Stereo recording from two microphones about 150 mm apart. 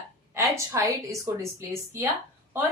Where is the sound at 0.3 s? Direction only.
20° right (ahead or behind).